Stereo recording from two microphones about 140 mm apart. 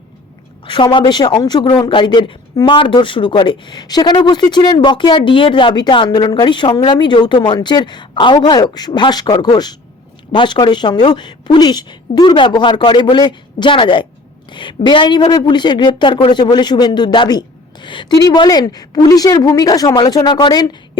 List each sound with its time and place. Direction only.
0.6 s a woman's voice: 35° left (ahead or behind)